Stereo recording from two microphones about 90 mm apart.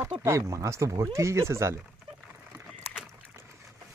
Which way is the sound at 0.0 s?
35° right (ahead or behind).